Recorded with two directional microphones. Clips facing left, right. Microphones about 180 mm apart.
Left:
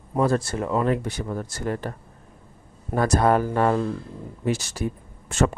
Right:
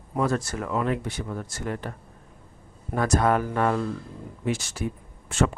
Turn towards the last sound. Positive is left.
turn(degrees=40)  # may be behind; listen again after turning